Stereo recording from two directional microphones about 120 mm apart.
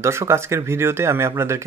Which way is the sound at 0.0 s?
25° right (ahead or behind).